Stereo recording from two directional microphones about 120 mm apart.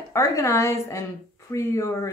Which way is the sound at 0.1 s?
25° left (ahead or behind).